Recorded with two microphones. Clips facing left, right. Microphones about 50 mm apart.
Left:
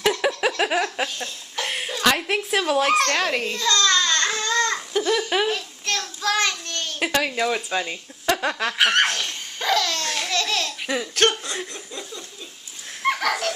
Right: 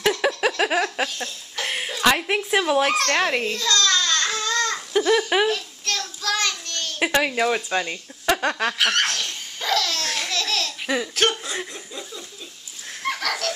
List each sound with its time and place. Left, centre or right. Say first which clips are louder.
0.0 s laughter: even; centre
3.2 s a child's voice: right 2 dB; centre
3.5 s a sound: left 1 dB; centre
4.9 s speech: right 4 dB; centre
5.5 s child singing: even; centre
7.2 s speech: right 2 dB; centre
8.7 s laughter: left 2 dB; centre
13.0 s a sound: left 4 dB; centre